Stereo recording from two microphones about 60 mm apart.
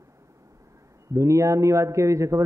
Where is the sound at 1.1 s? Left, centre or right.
Right.